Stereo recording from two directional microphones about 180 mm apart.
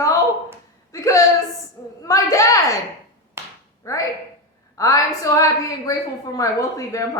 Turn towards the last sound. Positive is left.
turn(degrees=20)  # may be behind; listen again after turning